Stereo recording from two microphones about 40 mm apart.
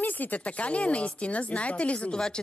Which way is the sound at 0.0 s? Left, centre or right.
Left.